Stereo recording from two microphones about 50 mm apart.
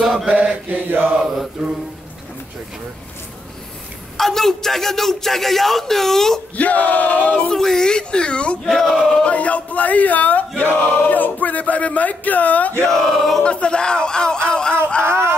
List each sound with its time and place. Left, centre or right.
0.0 s mantra: centre
0.3 s mantra: right
0.7 s mantra: right
1.6 s speech: centre
4.2 s a man's voice: centre
6.5 s a man's voice: left
7.4 s a sound: centre
8.6 s a man's voice: centre
9.2 s a man's voice: left
12.8 s a man's voice: centre
13.4 s a sound: left
14.9 s speech: left